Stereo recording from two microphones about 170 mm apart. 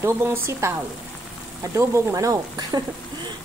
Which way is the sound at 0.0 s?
15° right (ahead or behind).